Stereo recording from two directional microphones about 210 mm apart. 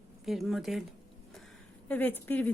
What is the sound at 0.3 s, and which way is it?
Speech, centre (ahead or behind).